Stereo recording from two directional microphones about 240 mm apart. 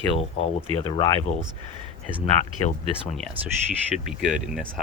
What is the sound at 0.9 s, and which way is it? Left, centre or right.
Speech, centre.